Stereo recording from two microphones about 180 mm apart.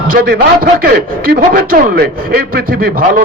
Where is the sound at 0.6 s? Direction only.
60° right (ahead or behind).